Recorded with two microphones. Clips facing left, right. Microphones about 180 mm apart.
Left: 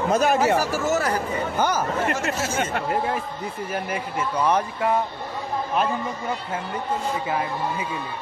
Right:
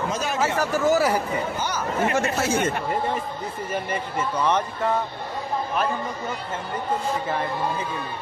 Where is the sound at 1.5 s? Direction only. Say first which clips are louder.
Left 5 dB; 55° left (ahead or behind).